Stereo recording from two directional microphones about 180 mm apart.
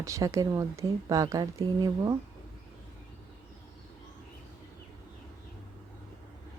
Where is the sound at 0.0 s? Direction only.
15° right (ahead or behind).